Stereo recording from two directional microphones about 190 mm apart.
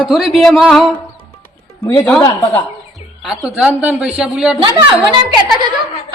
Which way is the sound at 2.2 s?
25° left (ahead or behind).